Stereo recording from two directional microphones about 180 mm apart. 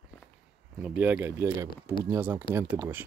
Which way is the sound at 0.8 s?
10° right (ahead or behind).